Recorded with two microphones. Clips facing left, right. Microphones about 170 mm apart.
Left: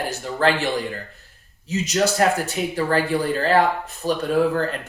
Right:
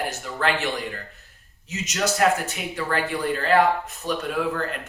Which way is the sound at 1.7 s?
30° left (ahead or behind).